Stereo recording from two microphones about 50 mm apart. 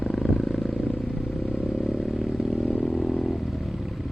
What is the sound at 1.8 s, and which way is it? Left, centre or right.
Vehicle, centre.